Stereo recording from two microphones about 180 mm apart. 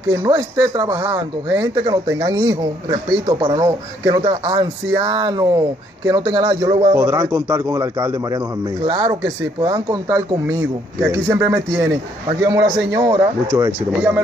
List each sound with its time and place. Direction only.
0.1 s a man's voice: 15° right (ahead or behind)